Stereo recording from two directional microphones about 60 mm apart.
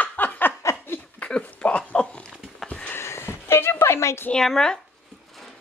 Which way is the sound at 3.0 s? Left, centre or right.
Left.